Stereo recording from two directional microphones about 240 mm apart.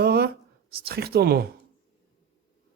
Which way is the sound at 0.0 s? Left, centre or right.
Right.